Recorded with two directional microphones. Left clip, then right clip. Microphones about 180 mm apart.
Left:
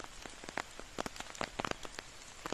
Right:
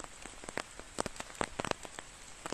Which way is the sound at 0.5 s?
55° right (ahead or behind).